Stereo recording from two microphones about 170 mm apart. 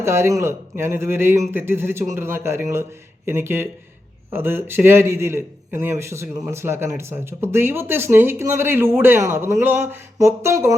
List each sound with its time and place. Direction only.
0.0 s a man's voice: 15° right (ahead or behind)